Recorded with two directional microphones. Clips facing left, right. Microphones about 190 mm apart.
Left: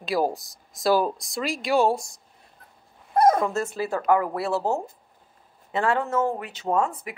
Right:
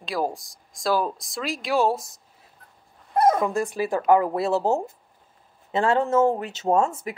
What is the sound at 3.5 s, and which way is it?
Speech, 15° right (ahead or behind).